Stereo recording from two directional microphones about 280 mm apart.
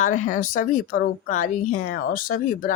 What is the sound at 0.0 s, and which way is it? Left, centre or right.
Speech, left.